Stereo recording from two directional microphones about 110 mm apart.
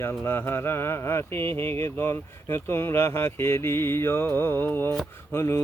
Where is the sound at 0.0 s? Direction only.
20° left (ahead or behind).